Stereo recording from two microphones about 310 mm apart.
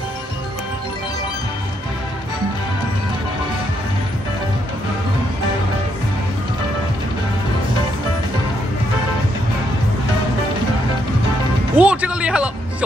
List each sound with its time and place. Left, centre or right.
11.7 s music: centre